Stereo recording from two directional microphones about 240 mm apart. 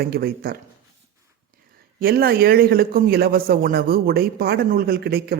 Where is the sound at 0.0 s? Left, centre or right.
Right.